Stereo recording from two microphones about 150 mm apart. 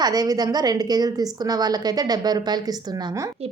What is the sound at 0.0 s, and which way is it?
A woman's voice, 25° right (ahead or behind).